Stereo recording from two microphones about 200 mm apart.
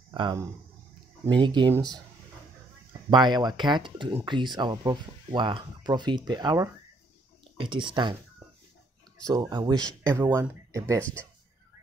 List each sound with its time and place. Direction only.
0.1 s speech: 20° right (ahead or behind)
3.1 s speech: 20° right (ahead or behind)
9.5 s speech: 20° right (ahead or behind)